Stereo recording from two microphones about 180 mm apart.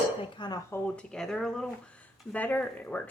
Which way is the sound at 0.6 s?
10° left (ahead or behind).